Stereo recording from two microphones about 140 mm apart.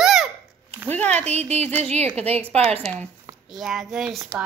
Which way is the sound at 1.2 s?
50° right (ahead or behind).